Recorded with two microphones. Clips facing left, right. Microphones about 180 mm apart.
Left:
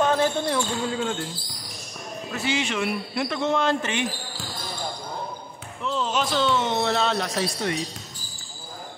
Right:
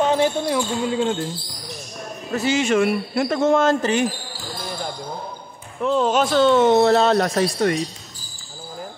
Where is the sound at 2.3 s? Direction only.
40° right (ahead or behind).